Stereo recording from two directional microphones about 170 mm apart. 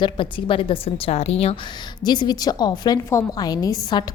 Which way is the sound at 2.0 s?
25° left (ahead or behind).